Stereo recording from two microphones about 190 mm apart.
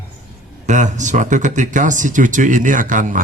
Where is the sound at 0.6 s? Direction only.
40° right (ahead or behind).